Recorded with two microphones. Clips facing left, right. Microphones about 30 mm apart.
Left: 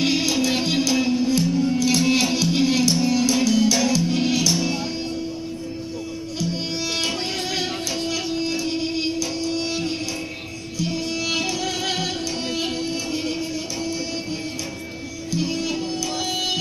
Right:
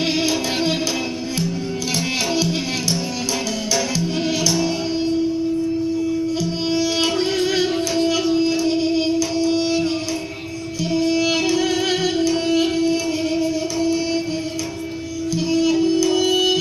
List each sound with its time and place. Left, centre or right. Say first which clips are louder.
0.2 s music: right 1 dB; right
0.7 s music: left 2 dB; right
1.0 s music: left 4 dB; centre
8.1 s music: right 5 dB; centre
11.1 s music: right 8 dB; centre
15.5 s music: right 9 dB; centre